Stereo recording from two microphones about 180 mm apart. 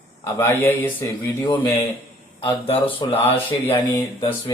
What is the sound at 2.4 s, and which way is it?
Speech, 30° left (ahead or behind).